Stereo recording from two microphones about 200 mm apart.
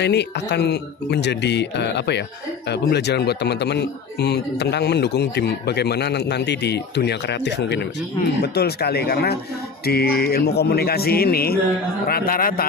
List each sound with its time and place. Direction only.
0.0 s speech: 60° left (ahead or behind)
8.4 s music: 55° left (ahead or behind)